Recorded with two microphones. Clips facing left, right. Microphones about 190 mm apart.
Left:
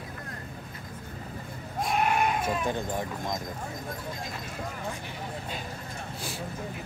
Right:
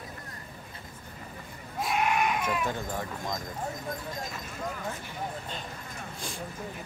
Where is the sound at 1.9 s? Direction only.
35° left (ahead or behind).